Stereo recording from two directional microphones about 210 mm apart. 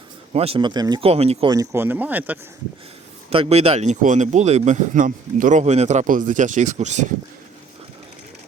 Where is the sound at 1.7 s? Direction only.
10° right (ahead or behind).